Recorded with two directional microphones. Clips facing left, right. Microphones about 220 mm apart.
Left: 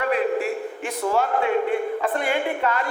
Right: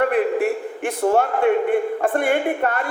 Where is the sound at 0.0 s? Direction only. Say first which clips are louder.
Right 4 dB; 55° right (ahead or behind).